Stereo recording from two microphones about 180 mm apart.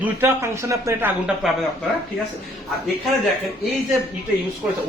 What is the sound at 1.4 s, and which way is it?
Speech, centre (ahead or behind).